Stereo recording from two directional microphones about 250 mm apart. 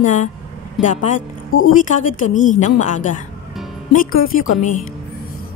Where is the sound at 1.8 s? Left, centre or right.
Left.